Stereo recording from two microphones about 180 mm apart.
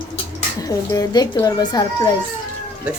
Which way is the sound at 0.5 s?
20° left (ahead or behind).